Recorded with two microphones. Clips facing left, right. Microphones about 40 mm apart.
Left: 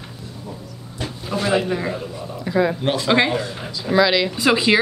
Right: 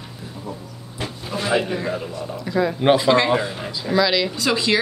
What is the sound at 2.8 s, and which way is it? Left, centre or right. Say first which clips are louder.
Speech: right 6 dB; centre.